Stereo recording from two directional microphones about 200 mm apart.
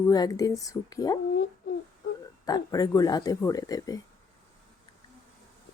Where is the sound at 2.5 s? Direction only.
20° left (ahead or behind).